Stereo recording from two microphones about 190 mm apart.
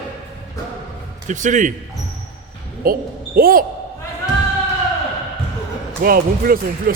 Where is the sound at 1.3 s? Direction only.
40° right (ahead or behind).